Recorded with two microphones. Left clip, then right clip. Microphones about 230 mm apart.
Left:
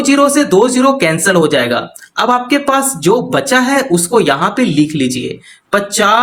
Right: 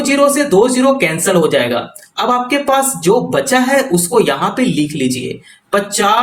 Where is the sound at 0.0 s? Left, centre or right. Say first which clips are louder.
Left 1 dB; left.